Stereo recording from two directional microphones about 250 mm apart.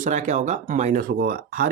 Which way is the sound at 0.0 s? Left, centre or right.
Right.